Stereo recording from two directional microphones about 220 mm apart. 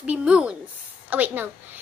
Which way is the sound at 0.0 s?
5° right (ahead or behind).